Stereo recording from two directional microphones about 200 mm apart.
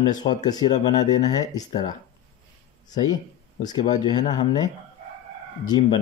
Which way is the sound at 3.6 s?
20° left (ahead or behind).